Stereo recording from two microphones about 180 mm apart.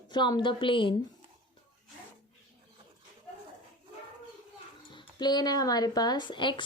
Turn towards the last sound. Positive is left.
turn(degrees=25)  # may be behind; listen again after turning